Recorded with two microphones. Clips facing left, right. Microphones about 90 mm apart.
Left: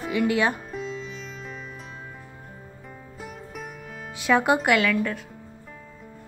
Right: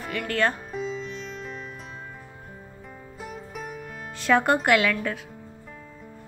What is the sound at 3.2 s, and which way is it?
Music, centre (ahead or behind).